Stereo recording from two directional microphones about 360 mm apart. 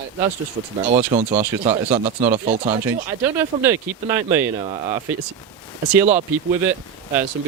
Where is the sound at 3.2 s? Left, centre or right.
Centre.